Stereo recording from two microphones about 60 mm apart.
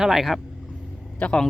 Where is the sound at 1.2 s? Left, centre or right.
Centre.